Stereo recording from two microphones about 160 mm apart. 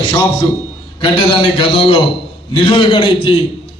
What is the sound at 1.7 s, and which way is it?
A man's voice, 35° left (ahead or behind).